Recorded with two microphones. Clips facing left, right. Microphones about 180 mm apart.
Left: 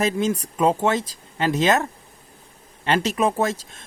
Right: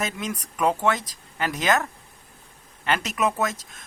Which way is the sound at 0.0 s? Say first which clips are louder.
Left 8 dB; 30° left (ahead or behind).